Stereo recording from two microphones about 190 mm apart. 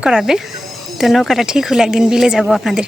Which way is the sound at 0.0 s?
5° right (ahead or behind).